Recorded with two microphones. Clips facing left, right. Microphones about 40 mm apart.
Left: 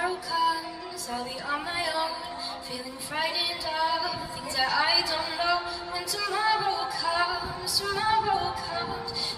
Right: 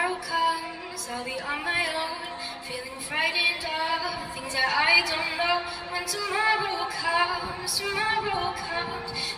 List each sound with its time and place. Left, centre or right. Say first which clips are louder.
0.0 s child singing: right 1 dB; right
1.5 s a sound: right 2 dB; right
3.2 s a woman's voice: right 5 dB; right